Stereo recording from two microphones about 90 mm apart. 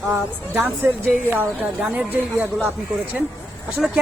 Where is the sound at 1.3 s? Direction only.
20° right (ahead or behind).